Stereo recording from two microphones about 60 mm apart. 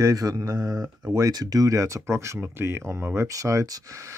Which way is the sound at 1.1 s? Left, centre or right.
Right.